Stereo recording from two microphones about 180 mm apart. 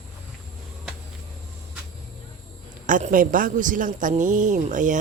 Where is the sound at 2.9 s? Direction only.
45° right (ahead or behind).